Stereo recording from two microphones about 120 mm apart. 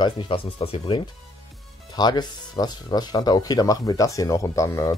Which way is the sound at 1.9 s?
35° left (ahead or behind).